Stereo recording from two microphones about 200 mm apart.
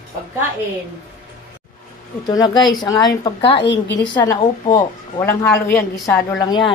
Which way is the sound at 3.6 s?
60° left (ahead or behind).